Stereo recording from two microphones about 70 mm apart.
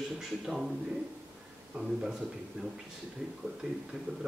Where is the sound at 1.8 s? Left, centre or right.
Centre.